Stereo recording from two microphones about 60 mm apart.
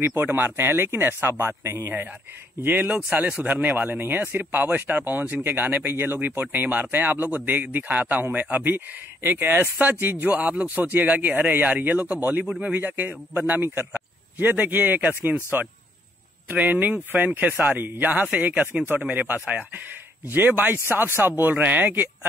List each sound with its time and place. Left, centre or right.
0.0 s speech: right
2.6 s speech: right
12.4 s speech: centre
12.7 s speech: right
16.4 s speech: right